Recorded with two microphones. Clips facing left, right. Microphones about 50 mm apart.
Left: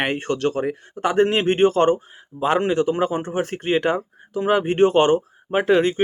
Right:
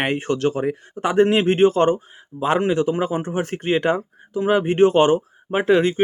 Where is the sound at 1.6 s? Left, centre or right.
Centre.